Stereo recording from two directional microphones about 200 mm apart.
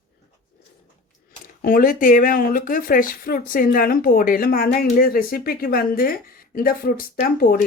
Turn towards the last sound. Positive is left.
turn(degrees=45)  # may be behind; listen again after turning